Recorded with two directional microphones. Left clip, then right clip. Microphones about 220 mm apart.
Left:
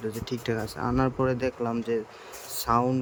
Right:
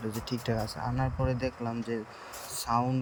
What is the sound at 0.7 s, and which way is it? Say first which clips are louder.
Speech: left 7 dB; 25° left (ahead or behind).